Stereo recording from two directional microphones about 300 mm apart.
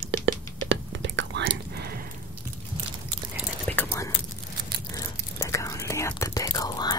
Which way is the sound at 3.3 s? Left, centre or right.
Centre.